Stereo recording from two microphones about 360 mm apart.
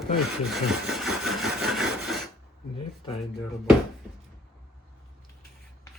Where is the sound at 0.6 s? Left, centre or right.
Centre.